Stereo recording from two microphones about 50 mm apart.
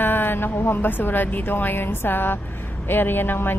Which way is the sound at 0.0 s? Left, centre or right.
Left.